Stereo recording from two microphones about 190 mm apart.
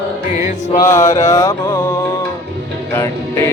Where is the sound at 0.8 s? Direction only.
15° left (ahead or behind).